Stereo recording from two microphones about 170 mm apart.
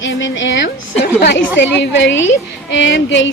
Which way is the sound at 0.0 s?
90° left.